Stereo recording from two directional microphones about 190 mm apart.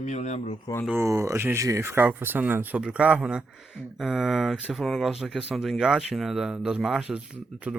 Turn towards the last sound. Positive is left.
turn(degrees=-5)  # may be behind; listen again after turning